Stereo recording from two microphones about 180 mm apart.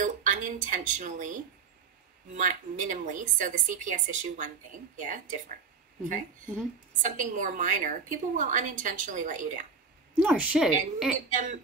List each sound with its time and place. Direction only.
0.0 s a woman's voice: 45° right (ahead or behind)
7.0 s a woman's voice: 45° right (ahead or behind)
10.1 s a woman's voice: 5° right (ahead or behind)